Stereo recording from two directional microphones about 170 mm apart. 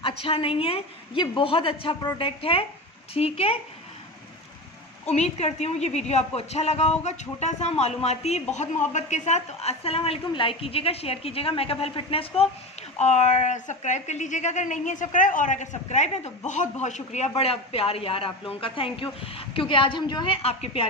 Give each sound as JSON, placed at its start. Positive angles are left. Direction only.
{"t": 0.0, "sound": "a woman's voice", "side_deg": 35}
{"t": 5.1, "sound": "a woman's voice", "side_deg": 40}